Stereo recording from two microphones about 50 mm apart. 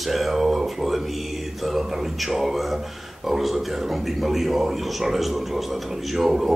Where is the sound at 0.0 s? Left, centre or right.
Centre.